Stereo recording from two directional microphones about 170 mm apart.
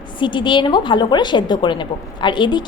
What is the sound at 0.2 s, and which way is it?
A woman's voice, 30° left (ahead or behind).